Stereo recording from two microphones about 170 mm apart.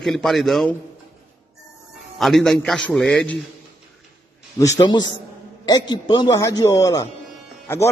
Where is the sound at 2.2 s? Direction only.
Centre (ahead or behind).